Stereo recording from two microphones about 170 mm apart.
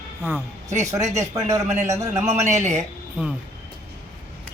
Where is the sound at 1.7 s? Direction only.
40° right (ahead or behind).